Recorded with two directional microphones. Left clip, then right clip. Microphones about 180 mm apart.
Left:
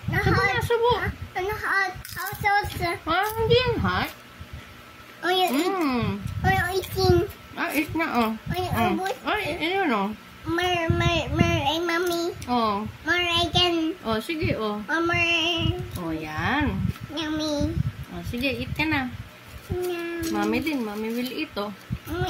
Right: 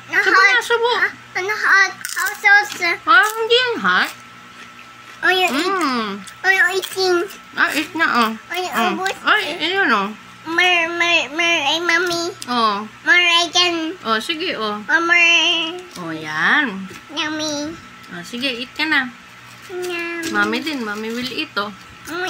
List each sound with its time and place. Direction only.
0.1 s a sound: 15° left (ahead or behind)
0.5 s a child's voice: 10° left (ahead or behind)
5.2 s a child's voice: 10° left (ahead or behind)
9.0 s child singing: 5° left (ahead or behind)
16.3 s speech: 5° left (ahead or behind)
18.4 s child singing: 5° left (ahead or behind)
20.3 s speech: centre (ahead or behind)
20.7 s speech: 15° right (ahead or behind)
21.2 s child singing: 5° left (ahead or behind)